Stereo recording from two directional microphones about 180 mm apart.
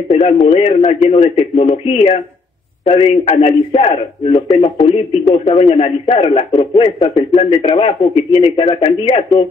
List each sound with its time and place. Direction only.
0.1 s a man's voice: 35° left (ahead or behind)